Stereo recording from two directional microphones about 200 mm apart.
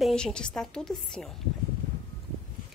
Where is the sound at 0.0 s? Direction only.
5° left (ahead or behind).